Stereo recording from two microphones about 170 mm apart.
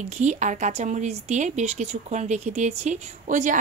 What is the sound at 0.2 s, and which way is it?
A woman's voice, 45° right (ahead or behind).